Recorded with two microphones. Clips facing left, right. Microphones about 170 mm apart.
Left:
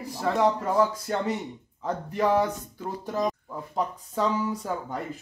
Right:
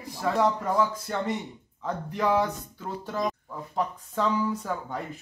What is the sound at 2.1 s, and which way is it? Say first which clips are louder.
Speech: left 2 dB; 5° left (ahead or behind).